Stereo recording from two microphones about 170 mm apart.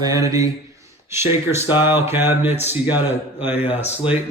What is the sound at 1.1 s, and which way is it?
A man's voice, 15° right (ahead or behind).